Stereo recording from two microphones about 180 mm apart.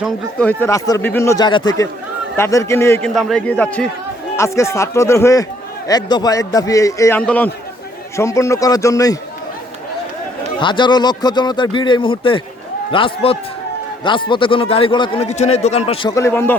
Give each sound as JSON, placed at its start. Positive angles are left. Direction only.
{"t": 0.0, "sound": "speech", "side_deg": 5}
{"t": 3.2, "sound": "speech", "side_deg": 5}
{"t": 7.2, "sound": "speech", "side_deg": 5}
{"t": 10.6, "sound": "speech", "side_deg": 25}
{"t": 16.1, "sound": "speech", "side_deg": 15}